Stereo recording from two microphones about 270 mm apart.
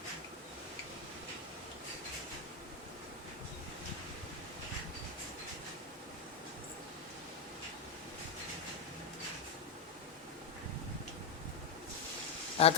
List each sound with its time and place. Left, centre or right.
12.6 s speech: left